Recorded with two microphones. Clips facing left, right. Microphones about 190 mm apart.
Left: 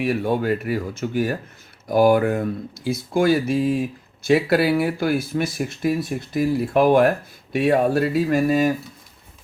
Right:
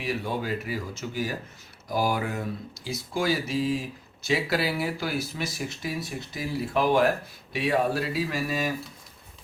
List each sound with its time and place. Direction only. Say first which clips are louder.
0.0 s speech: left 9 dB; 55° left (ahead or behind)